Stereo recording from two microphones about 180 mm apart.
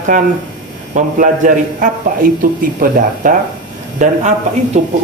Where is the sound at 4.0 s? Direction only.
40° right (ahead or behind).